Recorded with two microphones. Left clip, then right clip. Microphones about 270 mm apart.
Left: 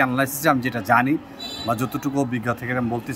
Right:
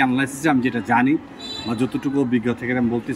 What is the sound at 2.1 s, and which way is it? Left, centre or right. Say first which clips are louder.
A man's voice: right 2 dB; centre.